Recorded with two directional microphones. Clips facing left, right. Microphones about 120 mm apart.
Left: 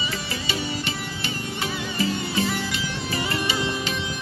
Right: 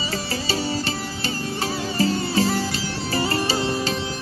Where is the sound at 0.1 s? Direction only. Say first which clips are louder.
Right 4 dB; 35° right (ahead or behind).